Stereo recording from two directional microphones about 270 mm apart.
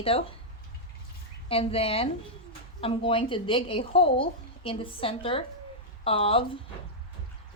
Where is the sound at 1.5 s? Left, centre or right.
Left.